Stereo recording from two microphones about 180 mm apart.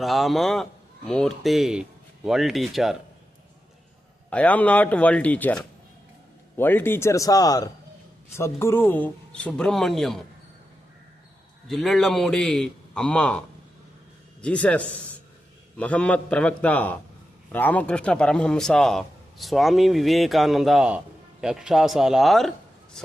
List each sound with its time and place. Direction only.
0.0 s a man's voice: centre (ahead or behind)
4.3 s a man's voice: 10° left (ahead or behind)
11.7 s a man's voice: centre (ahead or behind)
14.4 s a man's voice: 5° left (ahead or behind)